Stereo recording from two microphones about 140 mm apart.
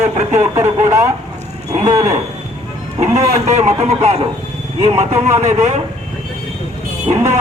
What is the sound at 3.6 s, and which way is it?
A man's voice, 55° right (ahead or behind).